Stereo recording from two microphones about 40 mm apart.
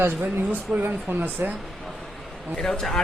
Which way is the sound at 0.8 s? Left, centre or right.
Right.